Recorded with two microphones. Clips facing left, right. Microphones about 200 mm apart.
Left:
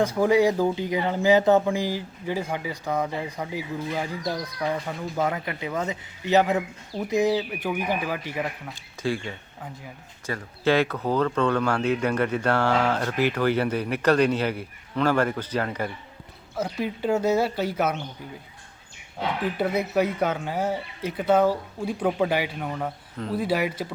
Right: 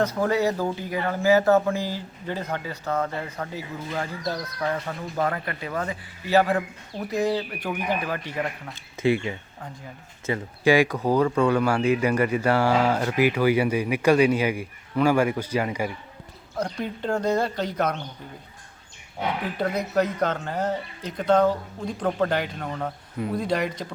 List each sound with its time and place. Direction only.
0.0 s speech: 10° left (ahead or behind)
7.2 s speech: 10° left (ahead or behind)
9.0 s speech: 20° right (ahead or behind)
10.2 s speech: 15° right (ahead or behind)
16.6 s speech: 5° left (ahead or behind)
19.5 s speech: 5° left (ahead or behind)